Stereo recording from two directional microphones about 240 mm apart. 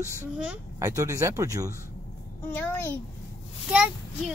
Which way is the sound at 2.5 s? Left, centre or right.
Centre.